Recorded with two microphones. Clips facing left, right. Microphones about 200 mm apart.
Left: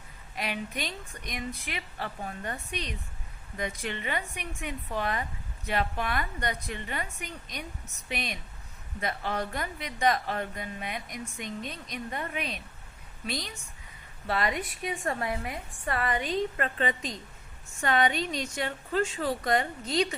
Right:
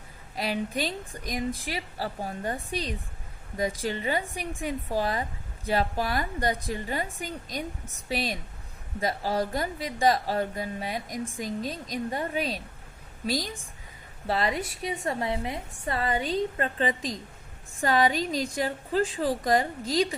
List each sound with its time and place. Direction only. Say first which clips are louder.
0.3 s a woman's voice: right 5 dB; 35° right (ahead or behind)